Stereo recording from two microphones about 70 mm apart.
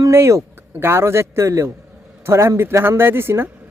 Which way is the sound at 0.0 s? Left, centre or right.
Right.